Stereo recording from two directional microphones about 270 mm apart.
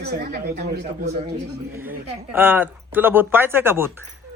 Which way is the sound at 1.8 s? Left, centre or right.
Centre.